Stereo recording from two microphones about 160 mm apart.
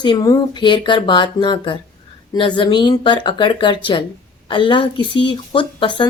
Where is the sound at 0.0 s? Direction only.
25° left (ahead or behind).